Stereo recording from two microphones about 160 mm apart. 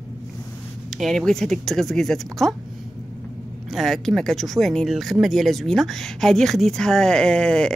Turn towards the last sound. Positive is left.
turn(degrees=5)  # may be behind; listen again after turning